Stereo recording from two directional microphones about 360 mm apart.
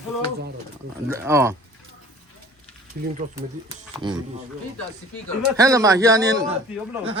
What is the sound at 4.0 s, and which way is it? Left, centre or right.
Speech, centre.